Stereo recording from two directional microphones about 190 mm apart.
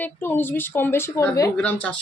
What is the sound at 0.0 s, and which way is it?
A woman's voice, 10° left (ahead or behind).